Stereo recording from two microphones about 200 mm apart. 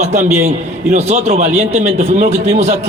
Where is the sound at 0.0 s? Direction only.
35° right (ahead or behind).